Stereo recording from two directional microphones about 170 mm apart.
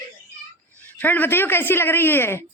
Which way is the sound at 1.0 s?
10° left (ahead or behind).